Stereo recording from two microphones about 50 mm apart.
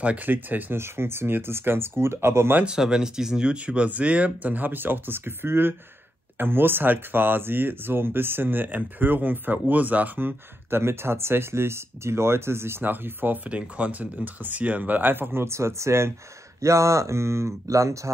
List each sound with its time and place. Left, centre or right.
0.0 s speech: right
0.3 s speech: right
0.7 s speech: right
2.6 s speech: centre; by 13.5 s right
13.5 s speech: right
15.4 s speech: right
16.6 s speech: right